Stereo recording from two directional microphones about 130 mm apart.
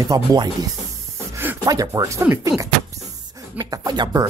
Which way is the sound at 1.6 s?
25° right (ahead or behind).